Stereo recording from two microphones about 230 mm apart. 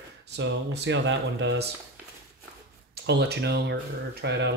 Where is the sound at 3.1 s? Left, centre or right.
Right.